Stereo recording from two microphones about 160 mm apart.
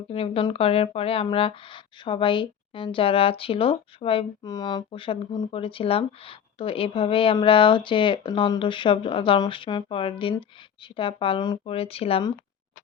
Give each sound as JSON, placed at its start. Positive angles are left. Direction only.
{"t": 0.1, "sound": "speech", "side_deg": 35}